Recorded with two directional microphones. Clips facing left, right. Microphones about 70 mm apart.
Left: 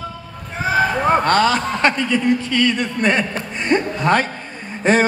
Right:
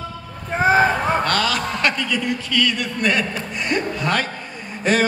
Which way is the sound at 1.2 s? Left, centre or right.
Left.